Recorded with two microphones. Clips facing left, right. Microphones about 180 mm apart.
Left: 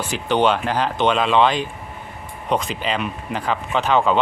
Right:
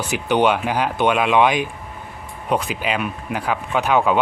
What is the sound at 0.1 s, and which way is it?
Speech, 10° right (ahead or behind).